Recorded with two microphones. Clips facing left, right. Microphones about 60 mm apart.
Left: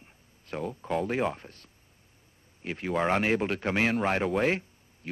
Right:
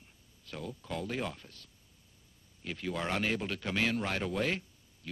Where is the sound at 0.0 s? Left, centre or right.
Left.